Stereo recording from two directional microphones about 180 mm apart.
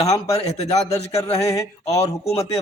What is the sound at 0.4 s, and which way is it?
Speech, 35° left (ahead or behind).